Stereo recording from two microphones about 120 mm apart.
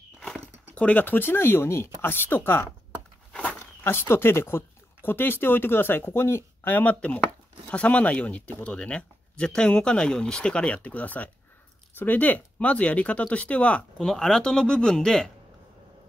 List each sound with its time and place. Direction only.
0.2 s speech: 10° left (ahead or behind)
3.8 s speech: 20° left (ahead or behind)